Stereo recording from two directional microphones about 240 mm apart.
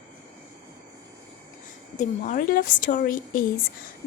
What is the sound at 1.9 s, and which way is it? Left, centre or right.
A woman's voice, left.